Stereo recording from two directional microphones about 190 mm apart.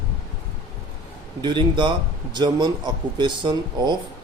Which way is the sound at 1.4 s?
25° right (ahead or behind).